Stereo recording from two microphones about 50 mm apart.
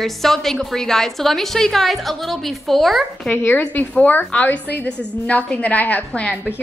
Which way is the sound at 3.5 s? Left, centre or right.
Left.